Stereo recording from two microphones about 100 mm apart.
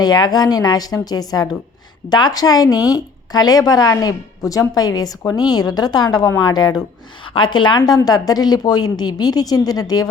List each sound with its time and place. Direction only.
0.0 s a woman's voice: 40° left (ahead or behind)
7.3 s a woman's voice: 55° left (ahead or behind)